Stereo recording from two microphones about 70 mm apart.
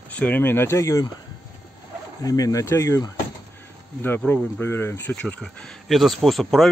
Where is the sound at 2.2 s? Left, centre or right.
Left.